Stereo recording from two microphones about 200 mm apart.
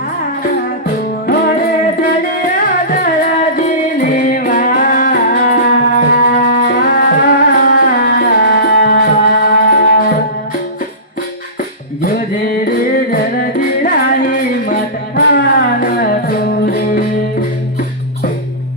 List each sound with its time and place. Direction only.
1.3 s music: 45° left (ahead or behind)
12.0 s music: 45° left (ahead or behind)